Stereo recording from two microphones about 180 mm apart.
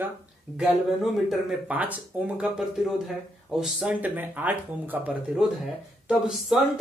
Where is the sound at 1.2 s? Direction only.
5° right (ahead or behind).